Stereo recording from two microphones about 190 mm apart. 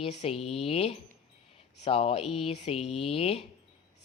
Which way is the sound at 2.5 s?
35° left (ahead or behind).